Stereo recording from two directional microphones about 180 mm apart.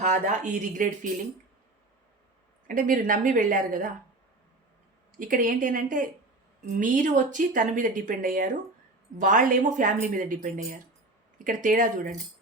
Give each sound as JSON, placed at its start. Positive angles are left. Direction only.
{"t": 0.0, "sound": "speech", "side_deg": -45}
{"t": 2.6, "sound": "speech", "side_deg": -50}
{"t": 5.1, "sound": "speech", "side_deg": -50}